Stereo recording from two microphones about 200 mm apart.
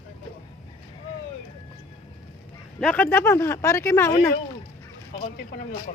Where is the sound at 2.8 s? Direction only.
5° left (ahead or behind).